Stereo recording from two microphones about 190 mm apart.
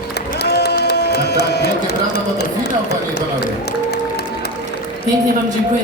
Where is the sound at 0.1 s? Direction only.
60° left (ahead or behind).